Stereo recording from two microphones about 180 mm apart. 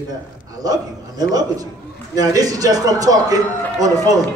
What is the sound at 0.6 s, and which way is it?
A man's voice, 20° right (ahead or behind).